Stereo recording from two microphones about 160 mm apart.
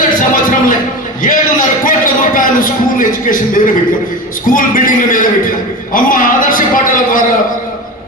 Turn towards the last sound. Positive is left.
turn(degrees=60)  # may be behind; listen again after turning